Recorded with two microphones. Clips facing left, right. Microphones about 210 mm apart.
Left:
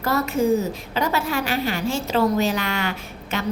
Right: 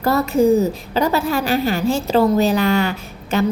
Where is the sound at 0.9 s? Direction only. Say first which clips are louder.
Right 5 dB; 35° right (ahead or behind).